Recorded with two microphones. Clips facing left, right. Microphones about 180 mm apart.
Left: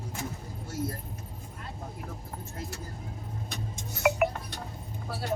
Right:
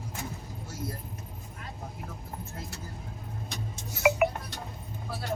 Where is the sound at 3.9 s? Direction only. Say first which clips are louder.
Right 1 dB; centre (ahead or behind).